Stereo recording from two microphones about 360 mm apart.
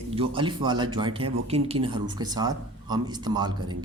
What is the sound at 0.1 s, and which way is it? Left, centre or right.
Speech, centre.